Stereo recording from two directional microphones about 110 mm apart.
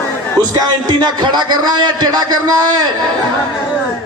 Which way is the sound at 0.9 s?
40° right (ahead or behind).